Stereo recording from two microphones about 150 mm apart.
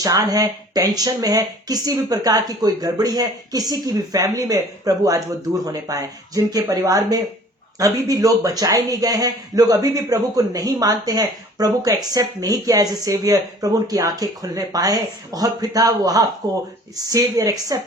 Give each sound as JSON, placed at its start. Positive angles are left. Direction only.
{"t": 0.0, "sound": "speech", "side_deg": -25}